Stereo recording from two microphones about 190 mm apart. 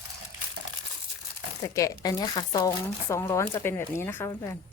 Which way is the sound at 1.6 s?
15° left (ahead or behind).